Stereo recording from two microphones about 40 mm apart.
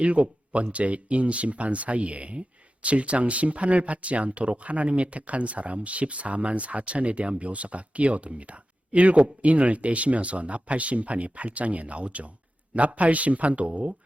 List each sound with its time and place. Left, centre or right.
0.0 s speech: right